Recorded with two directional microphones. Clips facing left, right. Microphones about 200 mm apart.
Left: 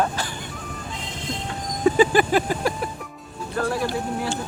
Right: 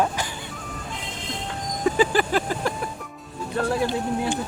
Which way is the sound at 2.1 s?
15° left (ahead or behind).